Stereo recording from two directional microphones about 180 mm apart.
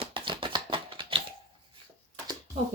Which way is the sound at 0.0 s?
30° right (ahead or behind).